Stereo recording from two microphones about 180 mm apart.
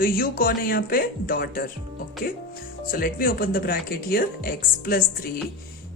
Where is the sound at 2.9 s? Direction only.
55° left (ahead or behind).